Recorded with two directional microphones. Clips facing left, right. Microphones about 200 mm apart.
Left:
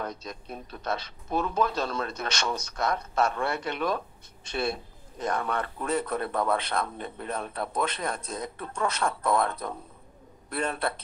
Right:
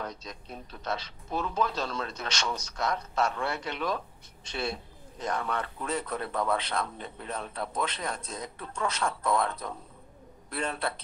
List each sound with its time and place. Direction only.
0.0 s a man's voice: 55° left (ahead or behind)